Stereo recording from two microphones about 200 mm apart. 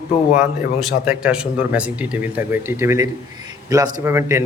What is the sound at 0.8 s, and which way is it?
Speech, centre (ahead or behind).